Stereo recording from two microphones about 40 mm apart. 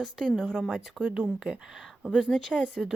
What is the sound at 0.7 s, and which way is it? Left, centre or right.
A woman's voice, right.